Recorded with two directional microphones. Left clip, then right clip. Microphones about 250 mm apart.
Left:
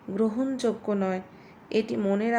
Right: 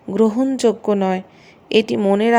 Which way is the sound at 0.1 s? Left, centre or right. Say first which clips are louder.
Right 10 dB; right.